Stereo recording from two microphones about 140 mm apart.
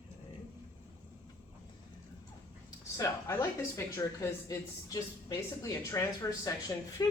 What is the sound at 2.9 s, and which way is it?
Speech, 20° left (ahead or behind).